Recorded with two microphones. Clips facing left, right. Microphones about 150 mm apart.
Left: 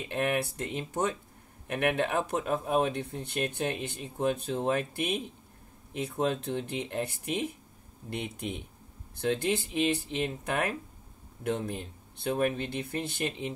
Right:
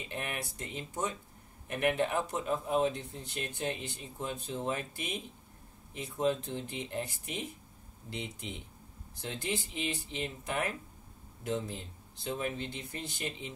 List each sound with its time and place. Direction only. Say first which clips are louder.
0.1 s speech: left 11 dB; 60° left (ahead or behind)